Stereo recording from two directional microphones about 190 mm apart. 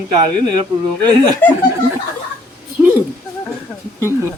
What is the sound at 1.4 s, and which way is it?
Speech, 10° left (ahead or behind).